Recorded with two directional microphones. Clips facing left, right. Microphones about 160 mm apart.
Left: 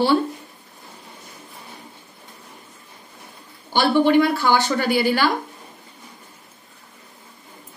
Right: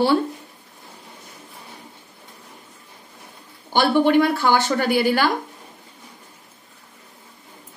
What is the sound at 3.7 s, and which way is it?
A woman's voice, 50° right (ahead or behind).